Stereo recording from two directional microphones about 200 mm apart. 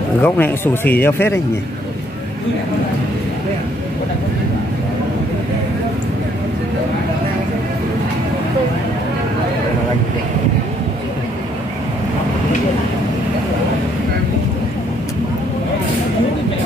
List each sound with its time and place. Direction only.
0.2 s speech: 10° left (ahead or behind)